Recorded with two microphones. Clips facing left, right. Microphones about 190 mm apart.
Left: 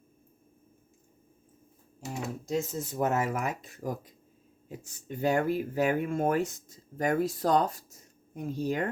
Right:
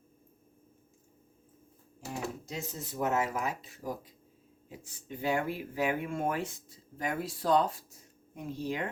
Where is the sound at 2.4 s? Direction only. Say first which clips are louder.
Left 9 dB; 45° left (ahead or behind).